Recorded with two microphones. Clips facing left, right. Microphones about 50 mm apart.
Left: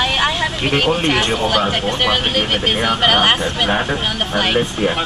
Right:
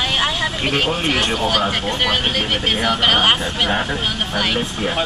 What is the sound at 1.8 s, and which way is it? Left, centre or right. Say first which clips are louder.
Speech: left 2 dB; left.